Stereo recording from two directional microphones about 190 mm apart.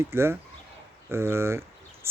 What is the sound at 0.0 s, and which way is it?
A man's voice, 10° right (ahead or behind).